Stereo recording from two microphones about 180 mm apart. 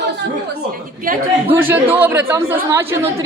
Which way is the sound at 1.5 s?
10° right (ahead or behind).